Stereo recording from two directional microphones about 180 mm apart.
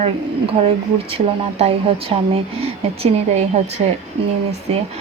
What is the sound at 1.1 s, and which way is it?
Speech, 30° right (ahead or behind).